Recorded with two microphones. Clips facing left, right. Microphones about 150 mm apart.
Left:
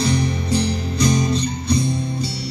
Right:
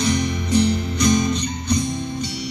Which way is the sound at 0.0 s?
30° left (ahead or behind).